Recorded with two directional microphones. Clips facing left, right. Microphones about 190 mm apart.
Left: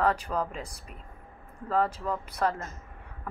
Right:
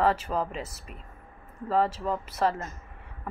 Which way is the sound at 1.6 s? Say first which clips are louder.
Right 2 dB; 5° right (ahead or behind).